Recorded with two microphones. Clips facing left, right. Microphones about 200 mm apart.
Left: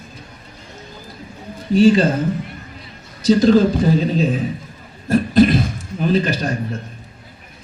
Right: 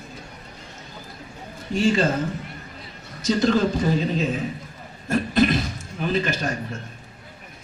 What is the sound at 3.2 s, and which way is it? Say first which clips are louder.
Speech: left 8 dB; 35° left (ahead or behind).